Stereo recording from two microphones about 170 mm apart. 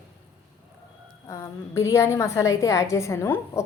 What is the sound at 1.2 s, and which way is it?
A woman's voice, 15° left (ahead or behind).